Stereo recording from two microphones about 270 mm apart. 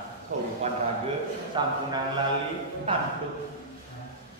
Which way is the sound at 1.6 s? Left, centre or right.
Centre.